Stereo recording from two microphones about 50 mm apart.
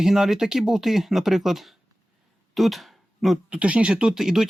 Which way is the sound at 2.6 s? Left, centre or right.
Centre.